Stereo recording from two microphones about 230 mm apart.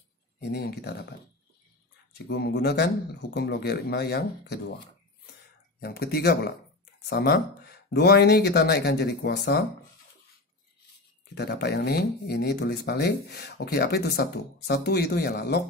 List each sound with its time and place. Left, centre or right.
0.4 s speech: left
2.2 s speech: left
5.8 s speech: left
11.3 s speech: left